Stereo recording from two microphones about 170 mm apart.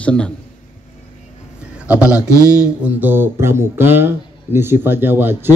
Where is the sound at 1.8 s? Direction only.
5° right (ahead or behind).